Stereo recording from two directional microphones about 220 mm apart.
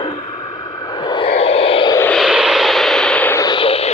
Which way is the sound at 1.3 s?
25° left (ahead or behind).